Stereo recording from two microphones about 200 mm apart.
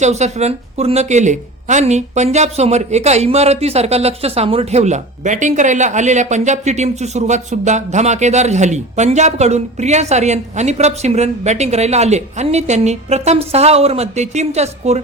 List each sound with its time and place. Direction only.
0.0 s speech: 35° right (ahead or behind)